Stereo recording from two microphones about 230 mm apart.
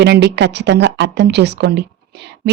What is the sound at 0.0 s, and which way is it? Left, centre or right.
Speech, right.